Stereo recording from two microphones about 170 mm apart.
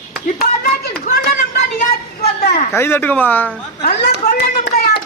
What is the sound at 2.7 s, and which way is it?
Speech, 15° left (ahead or behind).